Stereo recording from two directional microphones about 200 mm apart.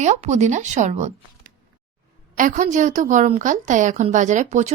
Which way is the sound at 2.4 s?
40° right (ahead or behind).